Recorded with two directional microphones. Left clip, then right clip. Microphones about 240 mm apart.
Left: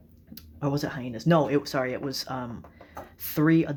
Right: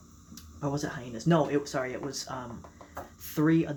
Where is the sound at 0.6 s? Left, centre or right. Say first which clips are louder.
Left 4 dB; left.